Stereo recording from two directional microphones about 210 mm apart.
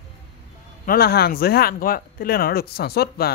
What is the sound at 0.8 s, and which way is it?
Speech, 45° left (ahead or behind).